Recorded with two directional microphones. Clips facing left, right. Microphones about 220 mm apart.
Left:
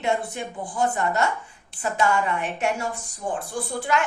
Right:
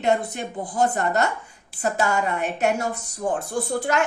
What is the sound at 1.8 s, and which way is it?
A woman's voice, 40° right (ahead or behind).